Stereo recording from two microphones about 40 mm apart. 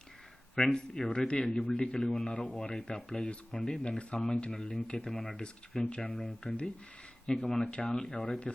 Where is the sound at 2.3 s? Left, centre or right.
Left.